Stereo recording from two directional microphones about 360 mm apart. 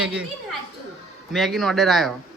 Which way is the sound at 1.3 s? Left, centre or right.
Centre.